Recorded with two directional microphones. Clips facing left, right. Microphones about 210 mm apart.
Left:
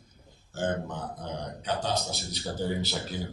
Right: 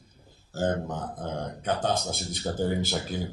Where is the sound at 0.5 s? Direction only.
40° right (ahead or behind).